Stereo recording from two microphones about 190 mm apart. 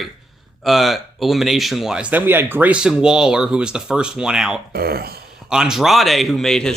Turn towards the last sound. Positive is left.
turn(degrees=5)  # may be behind; listen again after turning